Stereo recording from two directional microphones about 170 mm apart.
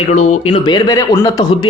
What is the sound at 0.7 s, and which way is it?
Speech, 20° left (ahead or behind).